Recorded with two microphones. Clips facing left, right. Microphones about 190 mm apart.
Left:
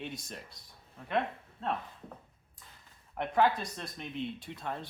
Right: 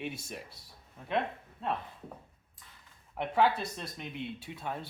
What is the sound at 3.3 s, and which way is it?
Speech, 5° right (ahead or behind).